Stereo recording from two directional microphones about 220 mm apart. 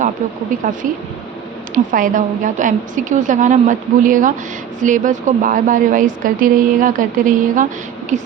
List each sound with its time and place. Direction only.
0.6 s a woman's voice: 35° right (ahead or behind)